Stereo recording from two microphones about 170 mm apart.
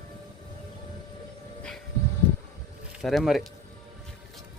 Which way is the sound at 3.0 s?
Centre (ahead or behind).